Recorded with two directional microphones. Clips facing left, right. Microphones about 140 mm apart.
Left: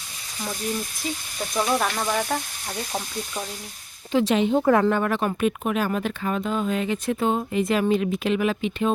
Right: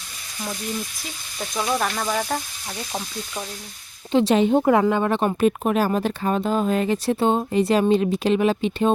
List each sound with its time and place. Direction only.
1.6 s speech: centre (ahead or behind)
4.1 s speech: 30° right (ahead or behind)
4.6 s speech: 15° right (ahead or behind)
5.5 s speech: 40° right (ahead or behind)